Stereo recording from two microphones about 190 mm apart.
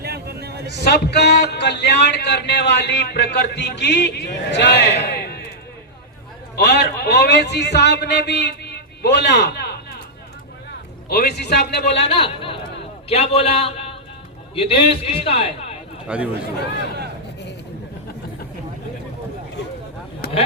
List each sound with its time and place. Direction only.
0.0 s a sound: 55° right (ahead or behind)
0.7 s speech: 60° left (ahead or behind)
6.6 s speech: 60° left (ahead or behind)
11.1 s speech: 60° left (ahead or behind)
12.0 s a man's voice: 30° left (ahead or behind)
16.0 s speech: 5° right (ahead or behind)